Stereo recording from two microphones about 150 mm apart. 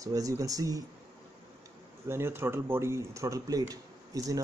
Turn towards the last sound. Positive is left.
turn(degrees=-20)  # may be behind; listen again after turning